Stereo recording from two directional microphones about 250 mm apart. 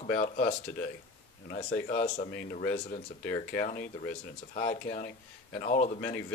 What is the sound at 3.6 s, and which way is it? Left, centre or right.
Speech, left.